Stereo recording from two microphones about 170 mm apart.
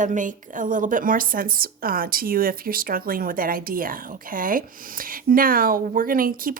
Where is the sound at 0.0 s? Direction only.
50° right (ahead or behind).